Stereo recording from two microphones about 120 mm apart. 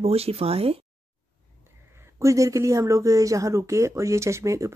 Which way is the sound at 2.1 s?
25° right (ahead or behind).